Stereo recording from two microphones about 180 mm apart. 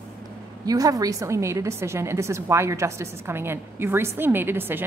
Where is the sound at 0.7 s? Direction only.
20° right (ahead or behind).